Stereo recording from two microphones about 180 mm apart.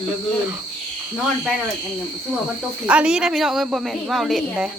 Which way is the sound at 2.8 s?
5° right (ahead or behind).